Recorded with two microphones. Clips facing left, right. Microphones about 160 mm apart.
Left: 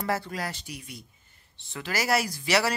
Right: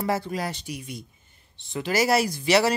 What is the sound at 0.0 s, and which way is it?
Speech, 15° right (ahead or behind).